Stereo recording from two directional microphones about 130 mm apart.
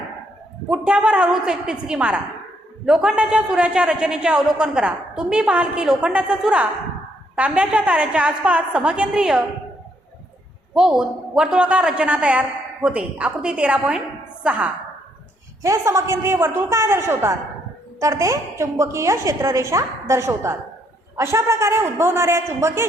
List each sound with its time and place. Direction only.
0.7 s a man's voice: 5° right (ahead or behind)
10.8 s a man's voice: 5° right (ahead or behind)
15.6 s a woman's voice: 20° right (ahead or behind)